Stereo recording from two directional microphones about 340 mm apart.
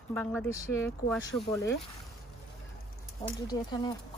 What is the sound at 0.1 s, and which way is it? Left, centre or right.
Speech, centre.